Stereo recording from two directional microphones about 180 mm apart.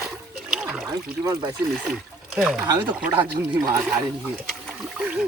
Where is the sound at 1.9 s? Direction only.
Centre (ahead or behind).